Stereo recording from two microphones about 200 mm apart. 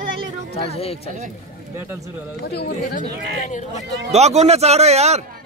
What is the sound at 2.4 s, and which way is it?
Speech, 55° left (ahead or behind).